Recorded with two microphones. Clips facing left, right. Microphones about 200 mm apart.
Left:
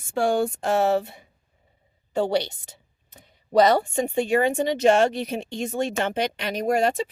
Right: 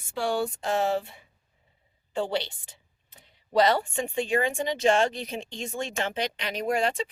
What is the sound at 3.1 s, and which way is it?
Speech, 45° left (ahead or behind).